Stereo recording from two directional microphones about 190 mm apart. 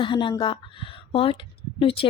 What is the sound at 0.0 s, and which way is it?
A woman's voice, 25° left (ahead or behind).